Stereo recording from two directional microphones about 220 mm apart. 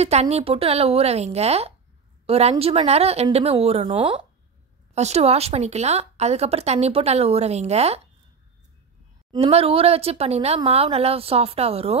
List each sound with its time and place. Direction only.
0.0 s a woman's voice: 30° right (ahead or behind)
9.3 s a woman's voice: 25° right (ahead or behind)